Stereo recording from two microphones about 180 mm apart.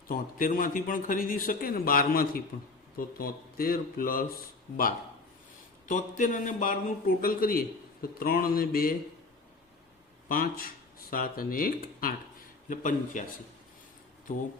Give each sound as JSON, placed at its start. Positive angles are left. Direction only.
{"t": 0.1, "sound": "a man's voice", "side_deg": 50}
{"t": 5.9, "sound": "a man's voice", "side_deg": 45}
{"t": 10.2, "sound": "a man's voice", "side_deg": 55}